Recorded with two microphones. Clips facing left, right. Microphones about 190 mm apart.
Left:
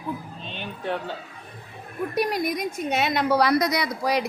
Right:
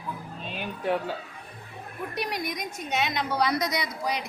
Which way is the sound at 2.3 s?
55° left (ahead or behind).